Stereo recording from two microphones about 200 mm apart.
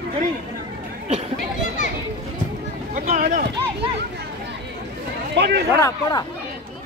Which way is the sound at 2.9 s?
35° right (ahead or behind).